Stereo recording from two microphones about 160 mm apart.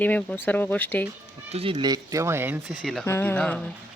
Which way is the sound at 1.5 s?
30° right (ahead or behind).